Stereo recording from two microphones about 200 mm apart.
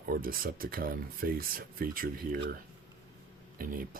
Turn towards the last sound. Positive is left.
turn(degrees=-45)  # may be behind; listen again after turning